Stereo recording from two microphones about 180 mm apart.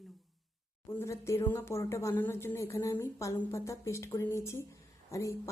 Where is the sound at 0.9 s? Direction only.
15° left (ahead or behind).